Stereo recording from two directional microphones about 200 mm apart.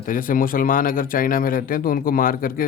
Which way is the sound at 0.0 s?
45° left (ahead or behind).